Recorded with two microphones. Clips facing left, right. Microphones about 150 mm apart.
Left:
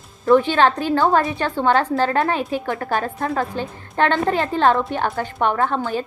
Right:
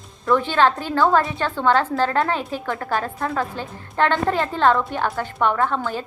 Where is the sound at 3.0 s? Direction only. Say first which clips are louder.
Left 2 dB; 45° left (ahead or behind).